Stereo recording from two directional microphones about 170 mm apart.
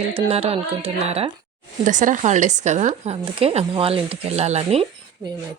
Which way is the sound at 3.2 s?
35° right (ahead or behind).